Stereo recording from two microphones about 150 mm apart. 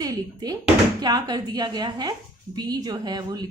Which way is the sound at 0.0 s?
25° right (ahead or behind).